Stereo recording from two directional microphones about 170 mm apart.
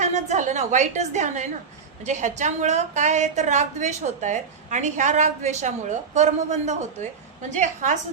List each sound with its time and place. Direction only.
0.0 s a woman's voice: 45° right (ahead or behind)